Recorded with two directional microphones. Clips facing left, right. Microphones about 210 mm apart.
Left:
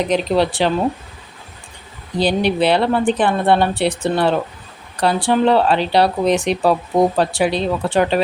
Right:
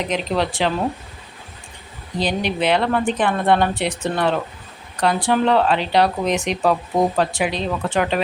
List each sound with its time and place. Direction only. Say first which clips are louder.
0.1 s speech: left 5 dB; 35° left (ahead or behind)
2.1 s speech: left 5 dB; 35° left (ahead or behind)